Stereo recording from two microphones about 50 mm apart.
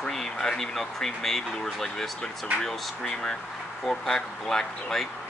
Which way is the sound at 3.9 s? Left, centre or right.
Centre.